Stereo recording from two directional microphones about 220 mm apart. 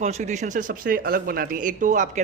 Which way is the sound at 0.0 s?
30° right (ahead or behind).